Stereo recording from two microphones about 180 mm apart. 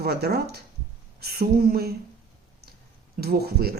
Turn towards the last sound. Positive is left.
turn(degrees=-60)  # may be behind; listen again after turning